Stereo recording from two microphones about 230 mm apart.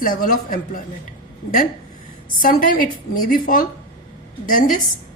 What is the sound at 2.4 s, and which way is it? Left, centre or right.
A woman's voice, left.